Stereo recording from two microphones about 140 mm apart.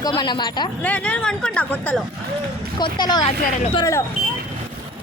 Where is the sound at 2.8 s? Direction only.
30° left (ahead or behind).